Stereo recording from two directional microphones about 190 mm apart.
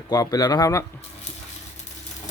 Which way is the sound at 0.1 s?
20° left (ahead or behind).